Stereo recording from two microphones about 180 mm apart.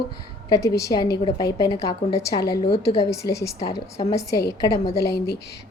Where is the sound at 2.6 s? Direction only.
35° left (ahead or behind).